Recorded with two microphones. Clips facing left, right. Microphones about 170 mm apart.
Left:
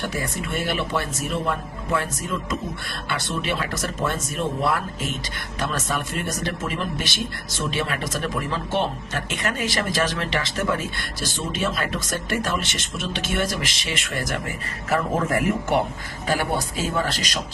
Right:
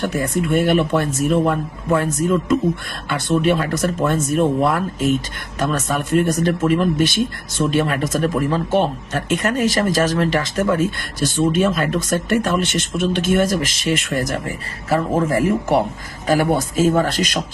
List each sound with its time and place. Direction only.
0.0 s speech: 50° right (ahead or behind); by 15.8 s 30° right (ahead or behind)
16.2 s speech: 45° right (ahead or behind)